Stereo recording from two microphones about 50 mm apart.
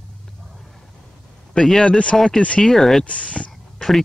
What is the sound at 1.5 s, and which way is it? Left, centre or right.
Speech, centre.